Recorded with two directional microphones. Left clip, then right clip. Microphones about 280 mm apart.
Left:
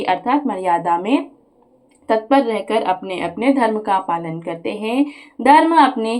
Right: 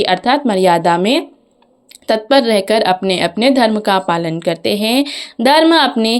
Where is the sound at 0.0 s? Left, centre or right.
Right.